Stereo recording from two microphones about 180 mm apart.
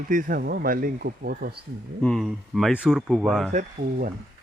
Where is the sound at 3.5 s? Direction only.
55° right (ahead or behind).